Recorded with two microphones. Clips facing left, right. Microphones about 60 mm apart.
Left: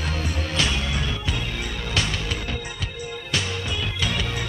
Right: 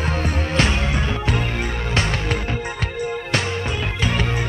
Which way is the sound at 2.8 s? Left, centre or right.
Right.